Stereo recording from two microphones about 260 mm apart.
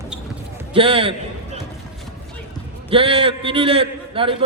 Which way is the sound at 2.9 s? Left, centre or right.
Right.